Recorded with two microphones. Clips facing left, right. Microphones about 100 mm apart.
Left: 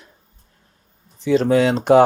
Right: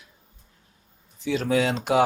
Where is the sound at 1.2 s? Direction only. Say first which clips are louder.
Left 7 dB; 40° left (ahead or behind).